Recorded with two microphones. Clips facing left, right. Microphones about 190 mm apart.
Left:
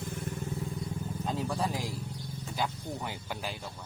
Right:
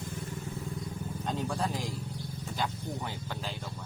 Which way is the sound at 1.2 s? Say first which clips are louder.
Even; centre (ahead or behind).